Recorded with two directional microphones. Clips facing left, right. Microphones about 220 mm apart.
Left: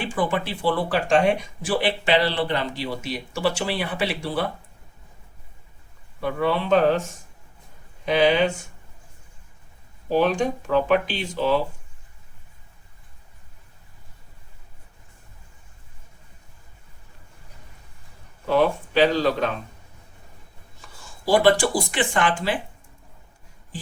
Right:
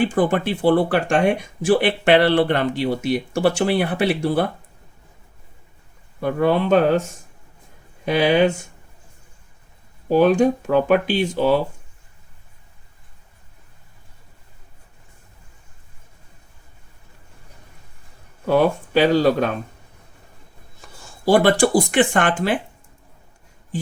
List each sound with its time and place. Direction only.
0.0 s speech: 45° right (ahead or behind)
6.1 s speech: 50° right (ahead or behind)
8.0 s speech: 50° right (ahead or behind)
10.1 s speech: 45° right (ahead or behind)
18.4 s speech: 45° right (ahead or behind)
21.2 s speech: 50° right (ahead or behind)